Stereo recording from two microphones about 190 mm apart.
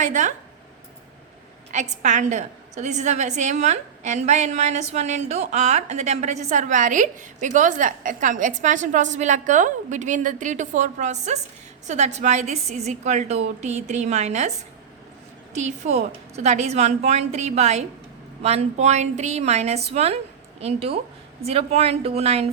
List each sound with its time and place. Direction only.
0.0 s a woman's voice: 40° right (ahead or behind)
1.7 s a woman's voice: 40° right (ahead or behind)
15.5 s a woman's voice: 35° right (ahead or behind)